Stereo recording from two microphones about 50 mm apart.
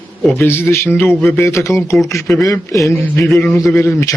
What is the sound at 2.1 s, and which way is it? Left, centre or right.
A man's voice, left.